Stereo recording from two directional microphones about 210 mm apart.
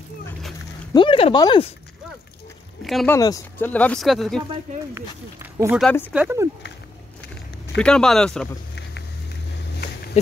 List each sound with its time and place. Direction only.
0.9 s speech: 25° left (ahead or behind)
2.8 s speech: centre (ahead or behind)
3.2 s speech: 15° left (ahead or behind); by 4.4 s centre (ahead or behind)
4.9 s speech: 10° right (ahead or behind)
7.7 s speech: 5° left (ahead or behind)